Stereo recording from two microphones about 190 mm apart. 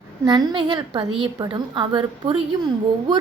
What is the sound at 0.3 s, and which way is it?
A woman's voice, 25° right (ahead or behind).